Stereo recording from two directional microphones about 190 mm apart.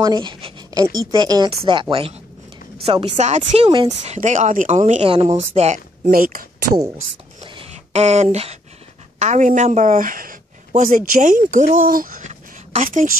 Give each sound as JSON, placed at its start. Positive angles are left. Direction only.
{"t": 0.0, "sound": "a woman's voice", "side_deg": -25}
{"t": 3.6, "sound": "speech", "side_deg": -25}
{"t": 4.0, "sound": "a woman's voice", "side_deg": -40}
{"t": 7.3, "sound": "a sound", "side_deg": -30}
{"t": 9.2, "sound": "a woman's voice", "side_deg": -40}